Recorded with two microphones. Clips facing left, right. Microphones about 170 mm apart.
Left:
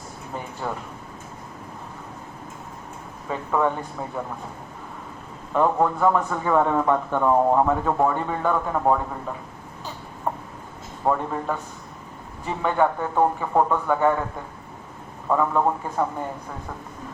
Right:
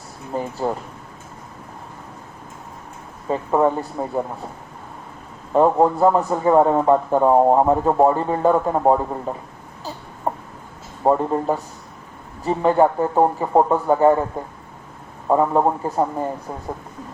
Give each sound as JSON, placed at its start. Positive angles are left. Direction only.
{"t": 0.3, "sound": "a man's voice", "side_deg": -35}
{"t": 3.2, "sound": "a man's voice", "side_deg": -35}
{"t": 5.5, "sound": "a man's voice", "side_deg": -35}
{"t": 10.3, "sound": "a sound", "side_deg": -30}
{"t": 11.0, "sound": "a man's voice", "side_deg": -30}
{"t": 15.3, "sound": "a man's voice", "side_deg": -30}